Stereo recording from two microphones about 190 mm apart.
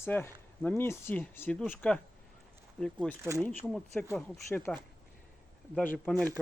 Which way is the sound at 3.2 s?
15° right (ahead or behind).